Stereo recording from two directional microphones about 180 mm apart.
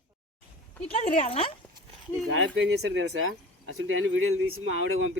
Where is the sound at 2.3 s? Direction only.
90° right.